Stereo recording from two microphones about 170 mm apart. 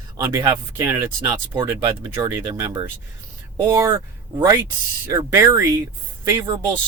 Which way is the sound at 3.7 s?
20° right (ahead or behind).